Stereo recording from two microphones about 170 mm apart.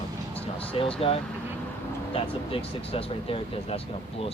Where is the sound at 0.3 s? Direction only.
35° left (ahead or behind).